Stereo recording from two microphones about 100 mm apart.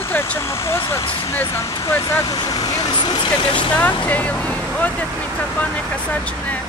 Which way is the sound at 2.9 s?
50° left (ahead or behind).